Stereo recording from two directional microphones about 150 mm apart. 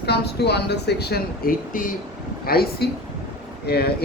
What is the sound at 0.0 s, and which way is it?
Speech, 90° left.